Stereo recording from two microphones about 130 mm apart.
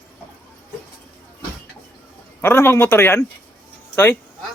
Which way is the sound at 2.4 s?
15° left (ahead or behind).